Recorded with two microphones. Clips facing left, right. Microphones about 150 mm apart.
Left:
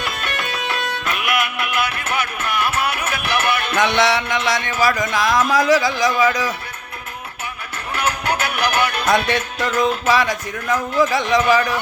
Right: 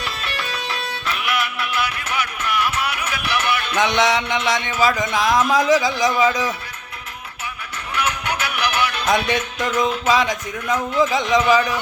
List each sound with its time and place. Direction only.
0.2 s music: 55° left (ahead or behind)
3.8 s speech: 15° right (ahead or behind)
7.9 s music: 35° left (ahead or behind)
8.4 s music: 55° left (ahead or behind)
9.0 s speech: 15° right (ahead or behind)